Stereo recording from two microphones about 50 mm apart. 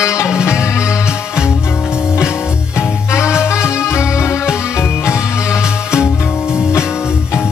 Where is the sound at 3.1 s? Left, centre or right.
Left.